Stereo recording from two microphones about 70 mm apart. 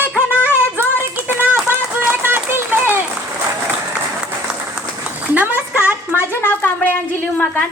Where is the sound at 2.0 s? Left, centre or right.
Right.